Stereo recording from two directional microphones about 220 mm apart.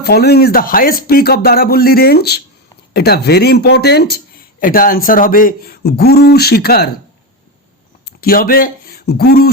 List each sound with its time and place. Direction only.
0.0 s speech: 45° left (ahead or behind)
8.0 s speech: 40° left (ahead or behind)